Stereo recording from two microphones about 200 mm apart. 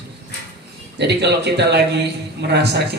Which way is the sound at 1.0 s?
55° right (ahead or behind).